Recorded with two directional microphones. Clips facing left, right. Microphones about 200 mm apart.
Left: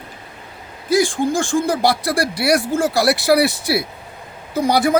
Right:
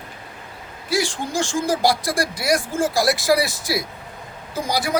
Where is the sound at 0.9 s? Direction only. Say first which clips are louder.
Left 6 dB; 50° left (ahead or behind).